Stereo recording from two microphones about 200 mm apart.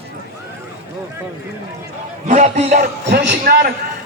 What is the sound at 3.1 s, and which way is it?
Speech, 50° right (ahead or behind).